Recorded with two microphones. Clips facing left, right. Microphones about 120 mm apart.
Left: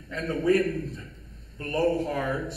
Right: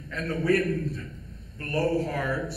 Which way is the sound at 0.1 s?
20° left (ahead or behind).